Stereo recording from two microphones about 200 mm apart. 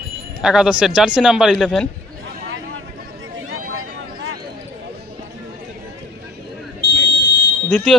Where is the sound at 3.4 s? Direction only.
90° right.